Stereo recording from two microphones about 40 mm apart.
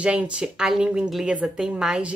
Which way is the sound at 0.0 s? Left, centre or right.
Right.